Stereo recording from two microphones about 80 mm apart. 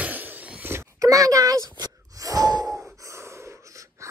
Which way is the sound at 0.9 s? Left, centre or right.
Right.